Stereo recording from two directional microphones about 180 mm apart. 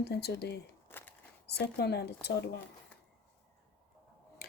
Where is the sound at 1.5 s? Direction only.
65° left (ahead or behind).